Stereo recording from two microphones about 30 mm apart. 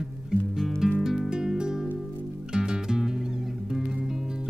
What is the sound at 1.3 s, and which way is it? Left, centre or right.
Music, right.